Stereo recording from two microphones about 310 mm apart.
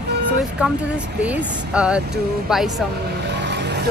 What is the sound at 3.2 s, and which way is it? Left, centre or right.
Vehicle, right.